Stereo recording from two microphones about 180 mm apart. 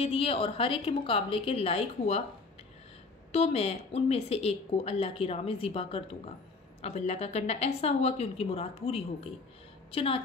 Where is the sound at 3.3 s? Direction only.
35° left (ahead or behind).